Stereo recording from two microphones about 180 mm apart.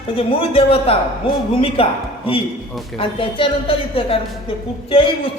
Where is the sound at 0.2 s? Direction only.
30° left (ahead or behind).